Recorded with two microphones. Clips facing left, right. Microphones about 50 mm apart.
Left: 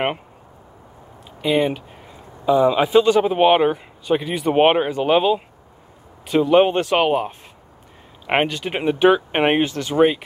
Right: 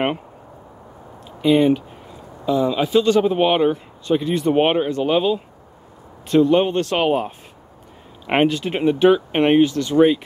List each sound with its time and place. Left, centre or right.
1.4 s speech: centre
6.6 s speech: left
6.9 s speech: centre